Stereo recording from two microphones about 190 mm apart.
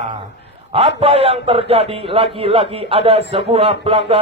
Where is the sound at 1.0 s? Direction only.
30° right (ahead or behind).